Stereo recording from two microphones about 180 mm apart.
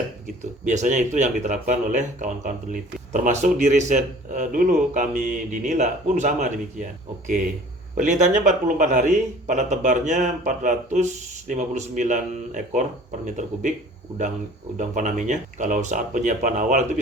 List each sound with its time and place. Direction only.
0.6 s speech: 40° right (ahead or behind)
7.9 s speech: 45° right (ahead or behind)
14.8 s speech: 45° right (ahead or behind)